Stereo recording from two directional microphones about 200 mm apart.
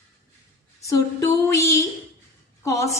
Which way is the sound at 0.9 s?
15° left (ahead or behind).